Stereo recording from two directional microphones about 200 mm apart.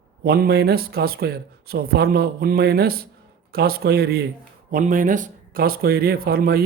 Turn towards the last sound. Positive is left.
turn(degrees=-50)  # may be behind; listen again after turning